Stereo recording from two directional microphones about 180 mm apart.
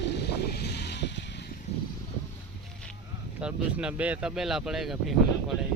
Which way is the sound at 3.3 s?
5° right (ahead or behind).